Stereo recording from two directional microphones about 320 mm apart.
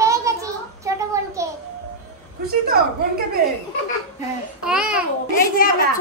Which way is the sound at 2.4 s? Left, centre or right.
Right.